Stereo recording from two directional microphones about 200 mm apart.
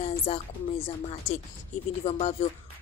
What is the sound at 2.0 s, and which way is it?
Speech, 30° left (ahead or behind).